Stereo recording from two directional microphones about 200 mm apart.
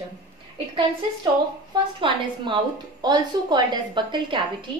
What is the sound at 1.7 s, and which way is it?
A woman's voice, 25° right (ahead or behind).